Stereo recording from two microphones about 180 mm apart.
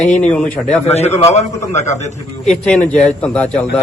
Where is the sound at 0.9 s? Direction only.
35° left (ahead or behind).